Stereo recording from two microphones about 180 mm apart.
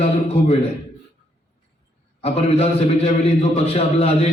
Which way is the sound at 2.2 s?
35° left (ahead or behind).